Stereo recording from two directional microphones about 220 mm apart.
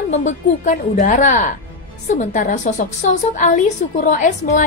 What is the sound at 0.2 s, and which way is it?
Speech, 35° left (ahead or behind).